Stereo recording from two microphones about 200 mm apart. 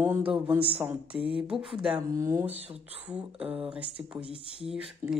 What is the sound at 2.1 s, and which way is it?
Speech, 15° right (ahead or behind).